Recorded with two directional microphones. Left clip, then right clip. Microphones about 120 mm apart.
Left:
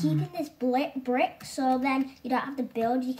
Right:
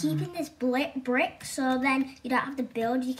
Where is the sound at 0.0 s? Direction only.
25° left (ahead or behind).